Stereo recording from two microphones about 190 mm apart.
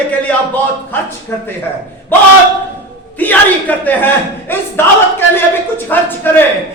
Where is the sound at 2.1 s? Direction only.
10° left (ahead or behind).